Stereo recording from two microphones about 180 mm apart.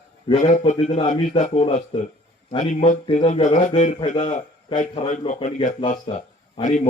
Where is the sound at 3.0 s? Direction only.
35° left (ahead or behind).